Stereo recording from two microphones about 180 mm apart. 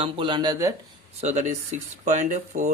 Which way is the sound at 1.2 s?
40° right (ahead or behind).